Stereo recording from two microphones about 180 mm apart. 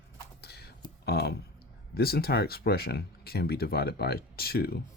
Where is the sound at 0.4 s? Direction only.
65° left (ahead or behind).